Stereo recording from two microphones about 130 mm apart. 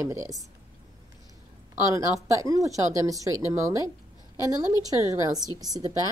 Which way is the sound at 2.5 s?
25° right (ahead or behind).